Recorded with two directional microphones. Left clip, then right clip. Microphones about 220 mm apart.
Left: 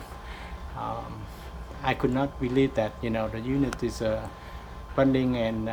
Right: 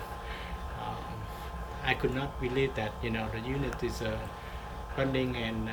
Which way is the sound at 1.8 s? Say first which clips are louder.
Left 5 dB; 20° left (ahead or behind).